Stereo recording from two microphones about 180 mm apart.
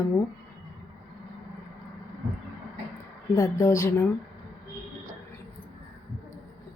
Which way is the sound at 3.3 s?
20° left (ahead or behind).